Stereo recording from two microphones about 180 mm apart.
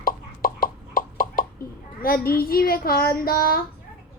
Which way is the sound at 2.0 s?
55° left (ahead or behind).